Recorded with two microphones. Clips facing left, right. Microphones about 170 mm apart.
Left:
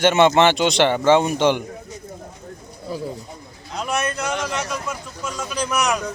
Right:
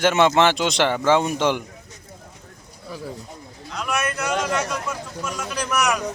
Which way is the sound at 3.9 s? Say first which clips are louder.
Left 1 dB; 20° left (ahead or behind).